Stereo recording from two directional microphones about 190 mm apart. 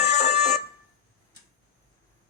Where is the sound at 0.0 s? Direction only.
35° left (ahead or behind).